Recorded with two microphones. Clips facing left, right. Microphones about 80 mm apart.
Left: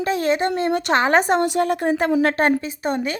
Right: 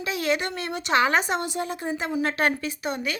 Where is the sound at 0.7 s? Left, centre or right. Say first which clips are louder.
Left 3 dB; left.